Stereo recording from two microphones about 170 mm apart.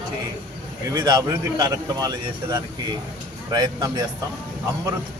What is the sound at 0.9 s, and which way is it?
A man's voice, 25° right (ahead or behind).